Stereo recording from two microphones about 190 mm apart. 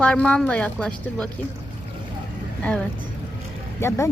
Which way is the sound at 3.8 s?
15° left (ahead or behind).